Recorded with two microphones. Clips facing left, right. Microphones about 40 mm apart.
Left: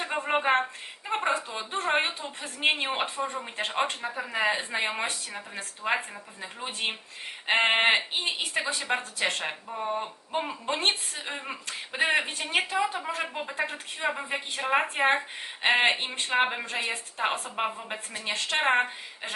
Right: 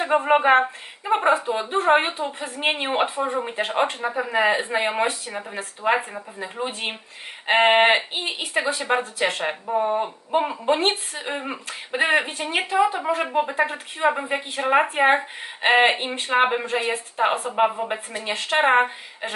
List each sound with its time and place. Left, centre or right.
0.0 s a woman's voice: centre
7.4 s a woman's voice: centre
9.7 s a woman's voice: centre
12.8 s a woman's voice: right